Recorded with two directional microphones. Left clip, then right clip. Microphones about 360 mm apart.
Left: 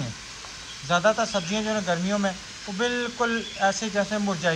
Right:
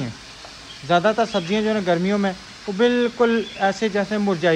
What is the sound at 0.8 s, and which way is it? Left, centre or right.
Speech, centre.